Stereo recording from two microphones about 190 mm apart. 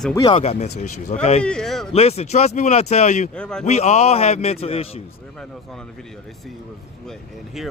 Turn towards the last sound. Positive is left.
turn(degrees=0)  # may be behind; listen again after turning